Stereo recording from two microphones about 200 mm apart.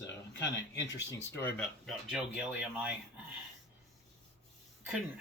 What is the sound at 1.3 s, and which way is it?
Speech, 5° left (ahead or behind).